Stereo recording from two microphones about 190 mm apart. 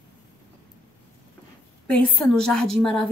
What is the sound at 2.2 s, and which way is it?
Speech, 5° left (ahead or behind).